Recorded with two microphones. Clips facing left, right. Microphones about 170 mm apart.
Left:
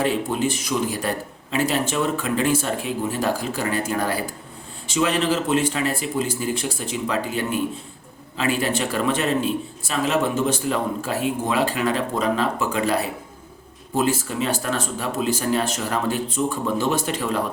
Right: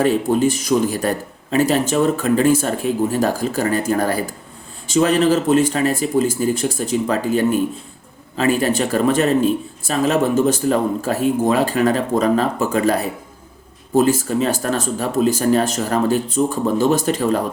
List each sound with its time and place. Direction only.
0.0 s a man's voice: 45° right (ahead or behind)